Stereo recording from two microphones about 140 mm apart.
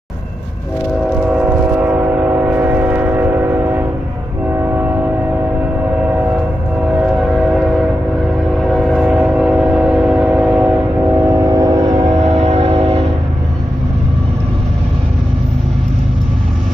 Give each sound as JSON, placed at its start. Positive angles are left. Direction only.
{"t": 1.2, "sound": "train", "side_deg": -10}
{"t": 8.7, "sound": "train", "side_deg": 0}
{"t": 11.2, "sound": "vehicle", "side_deg": -25}
{"t": 12.3, "sound": "train", "side_deg": -50}